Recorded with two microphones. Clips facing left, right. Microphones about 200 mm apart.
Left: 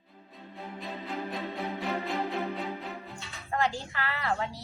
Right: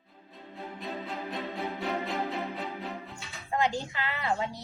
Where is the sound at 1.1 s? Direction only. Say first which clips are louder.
Left 1 dB; centre (ahead or behind).